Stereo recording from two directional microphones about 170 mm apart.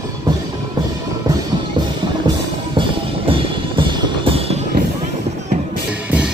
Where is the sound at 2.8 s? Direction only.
30° right (ahead or behind).